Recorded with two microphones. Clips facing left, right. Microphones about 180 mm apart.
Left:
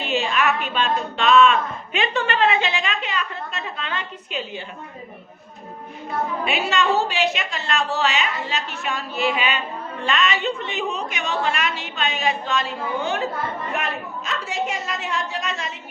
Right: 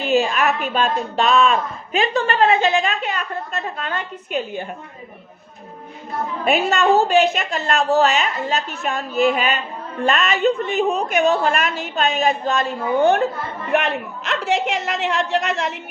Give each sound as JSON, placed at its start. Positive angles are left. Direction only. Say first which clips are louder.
{"t": 0.0, "sound": "speech", "louder": "right 4 dB", "side_deg": -40}
{"t": 6.4, "sound": "speech", "louder": "right 7 dB", "side_deg": -45}
{"t": 13.7, "sound": "a woman's voice", "louder": "right 7 dB", "side_deg": -70}